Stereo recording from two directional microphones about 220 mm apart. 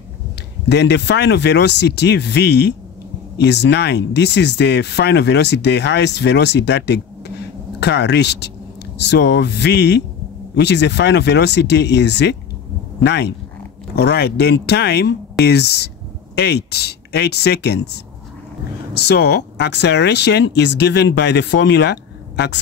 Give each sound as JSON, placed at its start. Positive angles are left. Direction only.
{"t": 0.7, "sound": "speech", "side_deg": 50}